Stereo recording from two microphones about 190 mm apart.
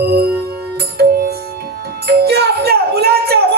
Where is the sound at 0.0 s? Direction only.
55° right (ahead or behind).